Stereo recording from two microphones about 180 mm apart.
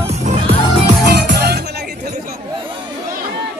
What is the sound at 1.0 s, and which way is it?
Music, 65° right (ahead or behind).